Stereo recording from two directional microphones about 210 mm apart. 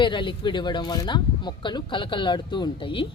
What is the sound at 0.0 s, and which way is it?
Speech, 25° left (ahead or behind).